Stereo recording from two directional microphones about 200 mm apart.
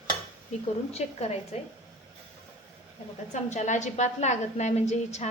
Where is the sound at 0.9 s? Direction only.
30° left (ahead or behind).